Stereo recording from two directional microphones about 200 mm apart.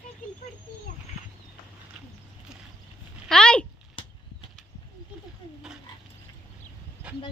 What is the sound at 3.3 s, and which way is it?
Speech, 5° left (ahead or behind).